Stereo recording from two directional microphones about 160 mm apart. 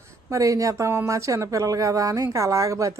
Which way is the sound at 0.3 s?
20° right (ahead or behind).